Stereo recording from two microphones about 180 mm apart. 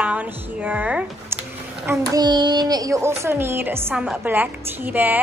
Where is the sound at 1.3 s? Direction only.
15° right (ahead or behind).